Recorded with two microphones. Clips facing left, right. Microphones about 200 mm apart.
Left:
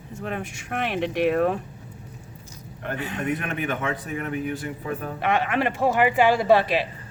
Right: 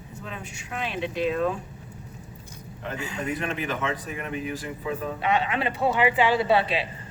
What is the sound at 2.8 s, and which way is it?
Speech, 60° left (ahead or behind).